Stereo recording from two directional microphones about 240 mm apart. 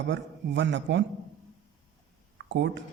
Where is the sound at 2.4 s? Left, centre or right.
Right.